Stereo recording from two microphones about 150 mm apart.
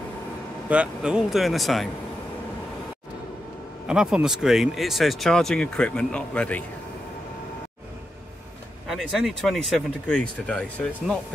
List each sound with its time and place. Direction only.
0.7 s speech: 5° right (ahead or behind)
3.8 s speech: 5° right (ahead or behind)
8.8 s speech: centre (ahead or behind)